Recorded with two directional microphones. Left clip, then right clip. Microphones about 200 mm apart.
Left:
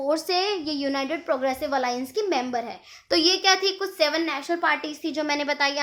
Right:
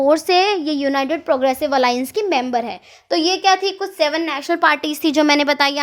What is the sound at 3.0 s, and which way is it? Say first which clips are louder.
A woman's voice: right 4 dB; 15° right (ahead or behind).